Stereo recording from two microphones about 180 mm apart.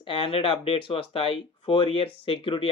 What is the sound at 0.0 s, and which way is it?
Speech, 30° left (ahead or behind).